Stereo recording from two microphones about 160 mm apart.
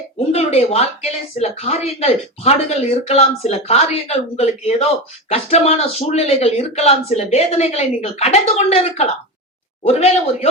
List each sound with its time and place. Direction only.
0.3 s a woman's voice: 40° left (ahead or behind)